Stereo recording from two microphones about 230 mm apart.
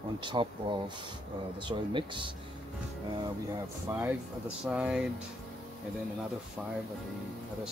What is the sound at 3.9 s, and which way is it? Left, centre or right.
Speech, centre.